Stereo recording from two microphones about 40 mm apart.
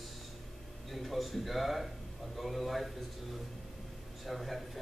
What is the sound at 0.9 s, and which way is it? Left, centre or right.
Speech, centre.